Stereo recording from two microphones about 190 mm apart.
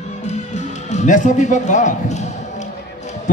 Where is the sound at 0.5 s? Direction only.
40° left (ahead or behind).